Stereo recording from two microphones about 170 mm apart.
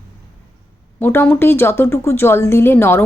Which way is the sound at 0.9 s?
15° left (ahead or behind).